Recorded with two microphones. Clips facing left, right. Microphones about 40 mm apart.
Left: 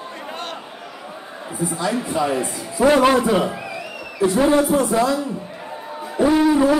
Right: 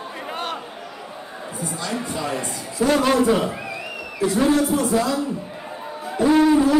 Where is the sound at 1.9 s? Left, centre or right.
Centre.